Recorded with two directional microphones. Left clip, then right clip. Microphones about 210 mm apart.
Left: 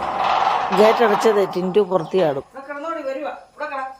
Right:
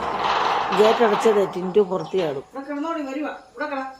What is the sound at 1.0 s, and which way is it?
Speech, 25° left (ahead or behind).